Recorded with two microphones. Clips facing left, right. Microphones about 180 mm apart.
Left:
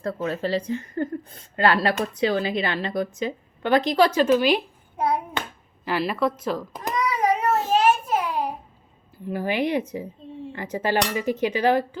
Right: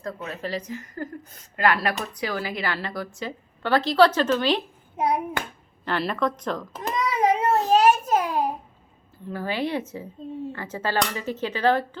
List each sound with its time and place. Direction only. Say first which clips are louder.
0.0 s a woman's voice: left 6 dB; 30° left (ahead or behind); by 4.6 s 10° left (ahead or behind)
4.9 s clapping: even; 20° right (ahead or behind)
5.8 s a woman's voice: left 2 dB; 5° left (ahead or behind)
6.9 s child singing: even; 20° right (ahead or behind)
7.7 s a sound: right 3 dB; 40° right (ahead or behind)
9.2 s speech: left 3 dB; 15° left (ahead or behind)